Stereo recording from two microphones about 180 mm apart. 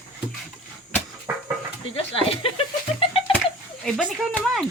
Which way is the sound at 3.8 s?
5° right (ahead or behind).